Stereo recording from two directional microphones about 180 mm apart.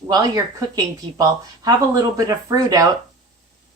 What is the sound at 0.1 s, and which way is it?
Speech, 20° right (ahead or behind).